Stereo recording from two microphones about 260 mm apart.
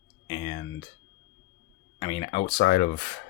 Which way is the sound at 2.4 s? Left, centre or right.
Left.